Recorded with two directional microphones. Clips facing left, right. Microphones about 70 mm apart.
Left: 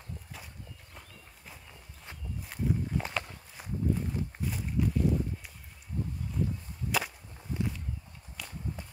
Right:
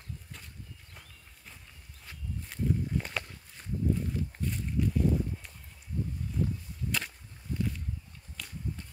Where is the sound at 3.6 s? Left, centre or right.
Centre.